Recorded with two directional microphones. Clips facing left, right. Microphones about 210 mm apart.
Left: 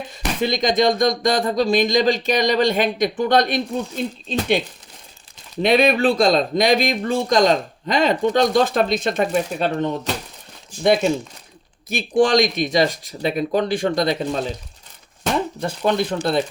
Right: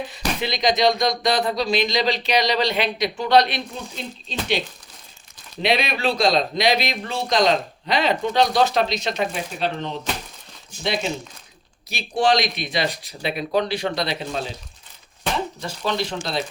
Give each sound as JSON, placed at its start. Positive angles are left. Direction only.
{"t": 0.4, "sound": "speech", "side_deg": 45}
{"t": 5.6, "sound": "speech", "side_deg": 50}